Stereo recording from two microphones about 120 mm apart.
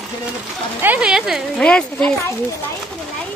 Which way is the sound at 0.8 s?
10° right (ahead or behind).